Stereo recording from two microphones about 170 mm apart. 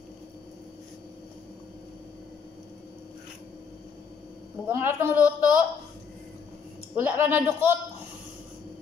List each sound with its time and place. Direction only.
4.6 s a woman's voice: 15° right (ahead or behind)
7.0 s a woman's voice: 15° right (ahead or behind)